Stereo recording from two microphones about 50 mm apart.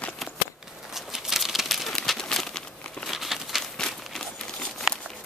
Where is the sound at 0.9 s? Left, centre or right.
Centre.